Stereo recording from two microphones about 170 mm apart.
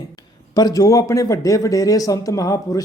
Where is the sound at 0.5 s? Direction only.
20° left (ahead or behind).